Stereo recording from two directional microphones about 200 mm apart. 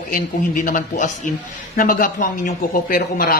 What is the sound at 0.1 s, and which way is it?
Speech, 45° left (ahead or behind).